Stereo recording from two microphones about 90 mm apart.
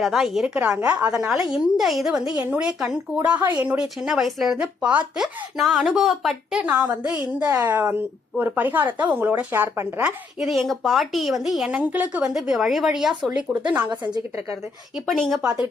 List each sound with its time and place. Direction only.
0.0 s speech: centre (ahead or behind)
1.1 s speech: 5° right (ahead or behind); by 10.1 s 25° right (ahead or behind)
10.4 s a woman's voice: centre (ahead or behind)
11.8 s speech: 15° right (ahead or behind)
13.9 s a woman's voice: 55° right (ahead or behind)
14.9 s a woman's voice: 5° left (ahead or behind)